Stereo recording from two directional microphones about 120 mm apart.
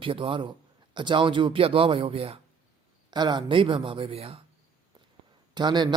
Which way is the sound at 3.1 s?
35° right (ahead or behind).